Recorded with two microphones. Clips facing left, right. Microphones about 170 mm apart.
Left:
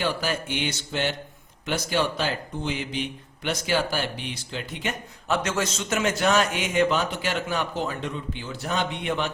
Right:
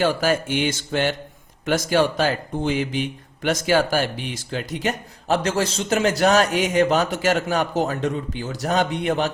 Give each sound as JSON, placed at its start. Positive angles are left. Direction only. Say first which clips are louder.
{"t": 0.0, "sound": "a man's voice", "louder": "right 7 dB", "side_deg": -45}